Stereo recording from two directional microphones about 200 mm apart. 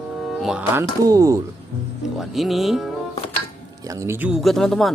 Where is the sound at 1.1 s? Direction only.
15° right (ahead or behind).